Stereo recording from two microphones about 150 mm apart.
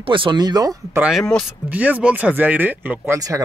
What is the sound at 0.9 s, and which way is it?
Speech, 5° right (ahead or behind).